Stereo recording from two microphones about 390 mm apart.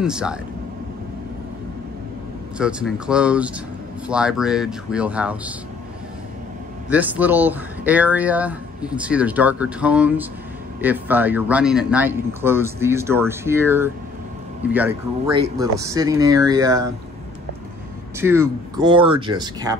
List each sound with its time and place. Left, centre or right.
0.0 s speech: centre
2.5 s speech: centre
6.9 s speech: centre
18.2 s speech: centre